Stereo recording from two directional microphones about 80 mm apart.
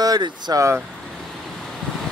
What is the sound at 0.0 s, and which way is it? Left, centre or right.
Speech, right.